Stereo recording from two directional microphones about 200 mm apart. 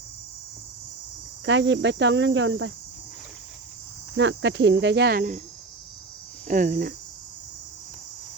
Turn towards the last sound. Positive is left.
turn(degrees=-45)  # may be behind; listen again after turning